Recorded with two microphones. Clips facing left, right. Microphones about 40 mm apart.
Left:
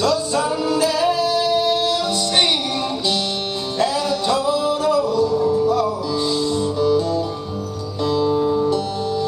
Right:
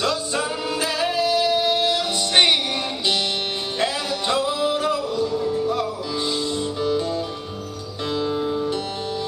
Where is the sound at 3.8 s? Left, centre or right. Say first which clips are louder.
Left 5 dB; right.